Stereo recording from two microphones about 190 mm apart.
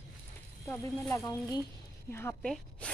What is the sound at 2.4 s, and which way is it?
Speech, 5° left (ahead or behind).